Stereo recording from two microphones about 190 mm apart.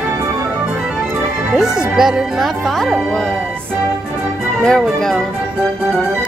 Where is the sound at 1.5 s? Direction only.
5° right (ahead or behind).